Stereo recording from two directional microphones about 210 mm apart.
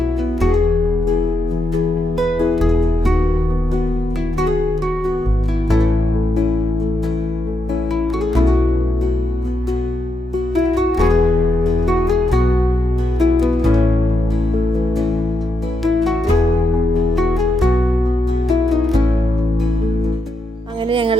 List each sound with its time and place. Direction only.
2.1 s music: centre (ahead or behind)
7.9 s music: centre (ahead or behind)
10.5 s music: centre (ahead or behind)
15.8 s music: centre (ahead or behind)
18.4 s music: centre (ahead or behind)
20.9 s music: 25° right (ahead or behind)